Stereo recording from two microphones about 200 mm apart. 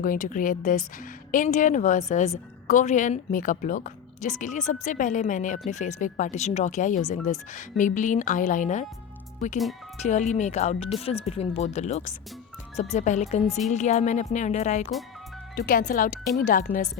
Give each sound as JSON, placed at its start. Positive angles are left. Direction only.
{"t": 0.0, "sound": "a woman's voice", "side_deg": 45}
{"t": 10.0, "sound": "a woman's voice", "side_deg": 35}